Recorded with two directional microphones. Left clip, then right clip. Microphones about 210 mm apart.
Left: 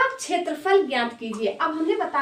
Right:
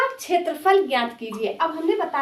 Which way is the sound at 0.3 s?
25° right (ahead or behind).